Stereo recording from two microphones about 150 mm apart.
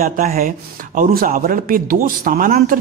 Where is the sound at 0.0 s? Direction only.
75° right (ahead or behind).